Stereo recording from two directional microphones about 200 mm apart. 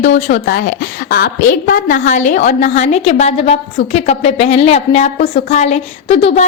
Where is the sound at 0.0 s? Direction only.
40° left (ahead or behind).